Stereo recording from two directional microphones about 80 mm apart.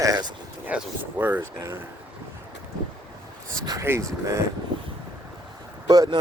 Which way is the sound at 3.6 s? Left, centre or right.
Right.